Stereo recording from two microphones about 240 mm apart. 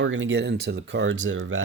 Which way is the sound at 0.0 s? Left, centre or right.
Right.